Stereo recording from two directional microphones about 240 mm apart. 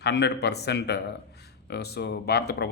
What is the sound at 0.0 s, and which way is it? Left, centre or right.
A man's voice, left.